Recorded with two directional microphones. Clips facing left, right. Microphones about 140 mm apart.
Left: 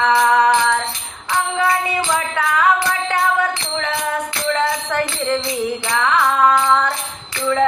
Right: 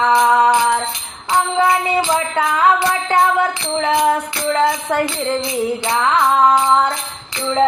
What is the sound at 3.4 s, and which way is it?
Music, 30° right (ahead or behind).